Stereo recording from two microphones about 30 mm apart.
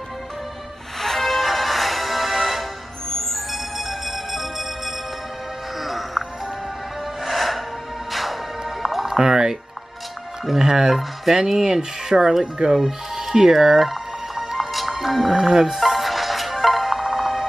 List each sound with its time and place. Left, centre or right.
0.9 s music: centre
3.1 s music: centre
7.2 s music: centre
9.0 s music: centre
9.3 s a sound: right
10.4 s music: centre
11.3 s speech: centre
12.7 s music: centre